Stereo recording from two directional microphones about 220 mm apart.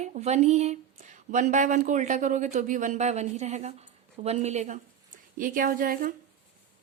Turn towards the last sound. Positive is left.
turn(degrees=-40)  # may be behind; listen again after turning